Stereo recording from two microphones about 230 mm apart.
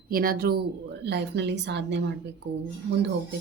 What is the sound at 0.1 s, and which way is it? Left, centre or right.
Speech, right.